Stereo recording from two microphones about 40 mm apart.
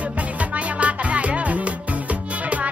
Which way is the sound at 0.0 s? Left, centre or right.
Right.